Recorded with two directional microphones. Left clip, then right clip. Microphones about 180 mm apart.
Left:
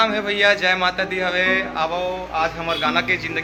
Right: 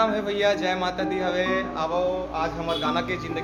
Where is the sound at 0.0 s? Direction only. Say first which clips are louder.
Left 5 dB; 5° left (ahead or behind).